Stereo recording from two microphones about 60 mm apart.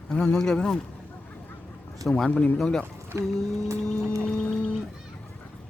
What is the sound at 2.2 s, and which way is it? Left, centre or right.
Speech, left.